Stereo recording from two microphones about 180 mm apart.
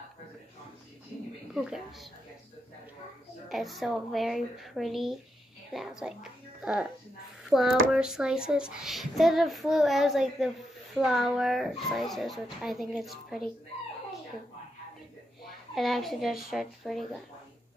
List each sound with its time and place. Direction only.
1.5 s speech: centre (ahead or behind)
3.4 s a child's voice: centre (ahead or behind)
15.7 s a child's voice: centre (ahead or behind)